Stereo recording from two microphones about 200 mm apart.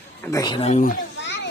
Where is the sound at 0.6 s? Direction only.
35° left (ahead or behind).